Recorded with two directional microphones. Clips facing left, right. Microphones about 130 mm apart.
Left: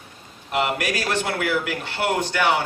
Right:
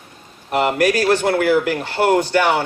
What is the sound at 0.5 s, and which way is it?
A man's voice, 40° right (ahead or behind).